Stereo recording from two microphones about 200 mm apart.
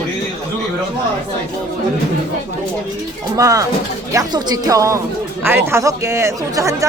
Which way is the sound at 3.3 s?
15° right (ahead or behind).